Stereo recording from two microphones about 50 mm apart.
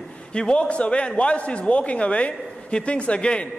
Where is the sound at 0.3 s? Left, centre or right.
Centre.